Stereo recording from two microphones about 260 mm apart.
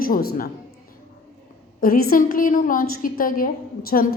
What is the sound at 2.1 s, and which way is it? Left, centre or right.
A woman's voice, left.